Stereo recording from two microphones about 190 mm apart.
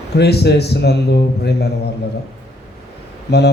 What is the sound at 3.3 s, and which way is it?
Speech, 60° left (ahead or behind).